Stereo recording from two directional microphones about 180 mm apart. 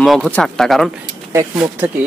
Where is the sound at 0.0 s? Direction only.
Centre (ahead or behind).